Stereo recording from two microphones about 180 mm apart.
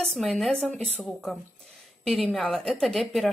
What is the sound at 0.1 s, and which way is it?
Speech, centre (ahead or behind).